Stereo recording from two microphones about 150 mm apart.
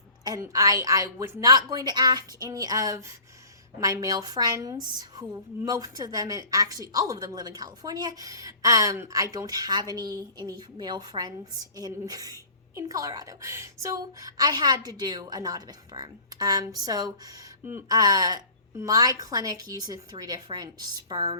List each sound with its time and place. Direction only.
0.3 s a woman's voice: 20° right (ahead or behind)